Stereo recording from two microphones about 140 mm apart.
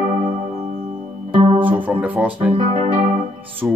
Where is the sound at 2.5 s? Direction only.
45° right (ahead or behind).